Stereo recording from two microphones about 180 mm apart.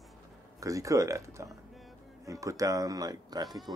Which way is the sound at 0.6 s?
20° right (ahead or behind).